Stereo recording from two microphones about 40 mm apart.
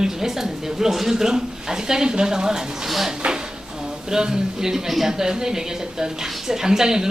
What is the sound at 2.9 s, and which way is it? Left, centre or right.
Speech, centre.